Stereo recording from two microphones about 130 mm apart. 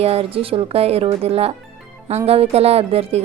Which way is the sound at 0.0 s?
50° right (ahead or behind).